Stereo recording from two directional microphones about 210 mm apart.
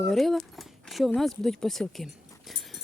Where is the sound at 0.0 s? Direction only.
Centre (ahead or behind).